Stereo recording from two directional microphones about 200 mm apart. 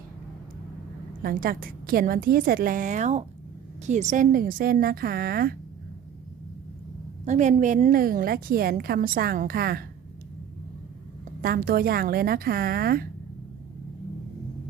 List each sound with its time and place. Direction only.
1.2 s a woman's voice: 45° right (ahead or behind)
7.3 s a woman's voice: 35° right (ahead or behind)
11.4 s a woman's voice: 50° right (ahead or behind)